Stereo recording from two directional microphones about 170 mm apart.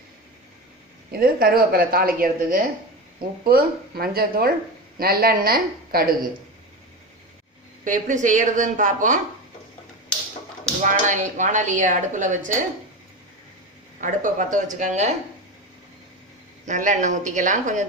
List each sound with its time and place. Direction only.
1.1 s speech: 60° right (ahead or behind)
7.9 s speech: 50° right (ahead or behind)
10.8 s speech: 45° right (ahead or behind)
14.0 s speech: 50° right (ahead or behind)
16.6 s speech: 45° right (ahead or behind)